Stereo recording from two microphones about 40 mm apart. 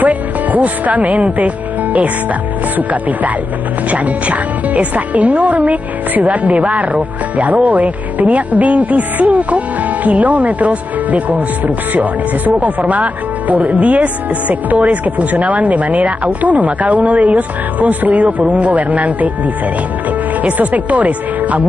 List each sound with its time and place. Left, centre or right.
0.0 s speech: right
2.9 s speech: right
20.5 s speech: right